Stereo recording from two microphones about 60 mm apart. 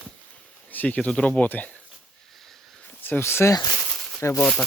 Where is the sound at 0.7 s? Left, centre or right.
Left.